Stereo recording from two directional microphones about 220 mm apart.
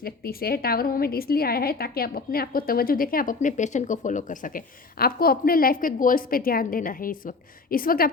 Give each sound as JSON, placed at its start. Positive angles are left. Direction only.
{"t": 0.0, "sound": "a woman's voice", "side_deg": 45}